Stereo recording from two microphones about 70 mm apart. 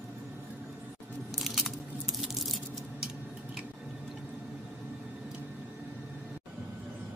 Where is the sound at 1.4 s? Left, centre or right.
Centre.